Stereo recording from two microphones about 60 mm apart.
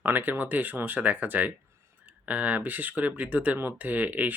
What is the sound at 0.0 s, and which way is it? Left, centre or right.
Speech, right.